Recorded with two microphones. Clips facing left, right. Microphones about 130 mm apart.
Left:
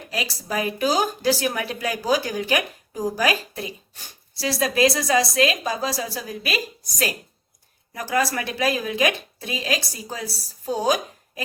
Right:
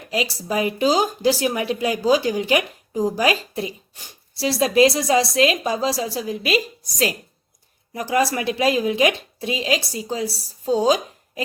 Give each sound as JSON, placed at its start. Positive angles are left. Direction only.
{"t": 0.1, "sound": "speech", "side_deg": -20}
{"t": 7.9, "sound": "speech", "side_deg": -25}